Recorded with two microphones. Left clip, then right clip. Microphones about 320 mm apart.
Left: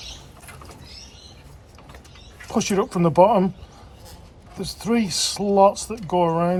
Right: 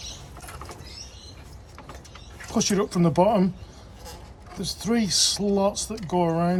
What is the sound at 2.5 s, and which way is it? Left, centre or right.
Speech, centre.